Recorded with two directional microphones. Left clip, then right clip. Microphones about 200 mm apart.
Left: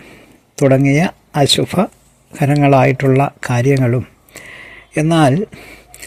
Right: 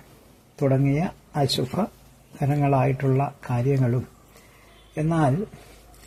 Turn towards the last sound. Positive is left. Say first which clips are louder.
# left 11 dB
turn(degrees=35)  # may be behind; listen again after turning